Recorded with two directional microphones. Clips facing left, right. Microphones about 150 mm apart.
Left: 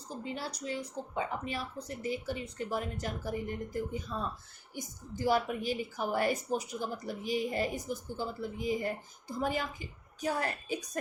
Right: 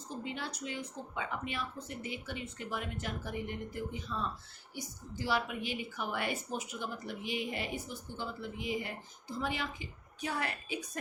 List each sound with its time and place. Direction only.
0.1 s a woman's voice: 40° left (ahead or behind)